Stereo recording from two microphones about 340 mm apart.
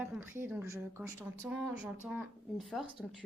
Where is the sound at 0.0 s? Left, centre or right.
Centre.